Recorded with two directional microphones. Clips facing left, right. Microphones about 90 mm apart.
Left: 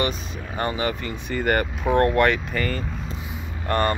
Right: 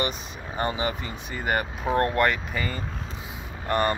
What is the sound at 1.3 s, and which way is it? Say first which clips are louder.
Speech: left 5 dB; 55° left (ahead or behind).